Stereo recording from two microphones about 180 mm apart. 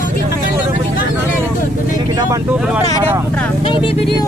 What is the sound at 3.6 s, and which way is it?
Speech, 30° left (ahead or behind).